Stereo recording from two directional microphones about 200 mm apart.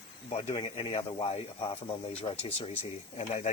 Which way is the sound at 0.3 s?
30° left (ahead or behind).